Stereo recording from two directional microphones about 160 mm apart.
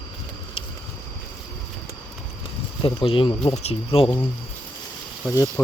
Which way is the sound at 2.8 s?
35° left (ahead or behind).